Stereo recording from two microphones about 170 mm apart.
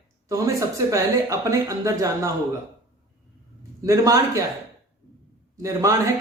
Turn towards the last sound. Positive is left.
turn(degrees=-20)  # may be behind; listen again after turning